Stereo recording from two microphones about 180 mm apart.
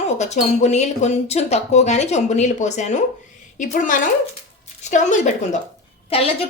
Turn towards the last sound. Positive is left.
turn(degrees=30)  # may be behind; listen again after turning